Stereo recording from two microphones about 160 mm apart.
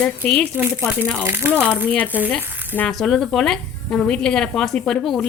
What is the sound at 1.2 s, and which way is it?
Speech, 15° right (ahead or behind).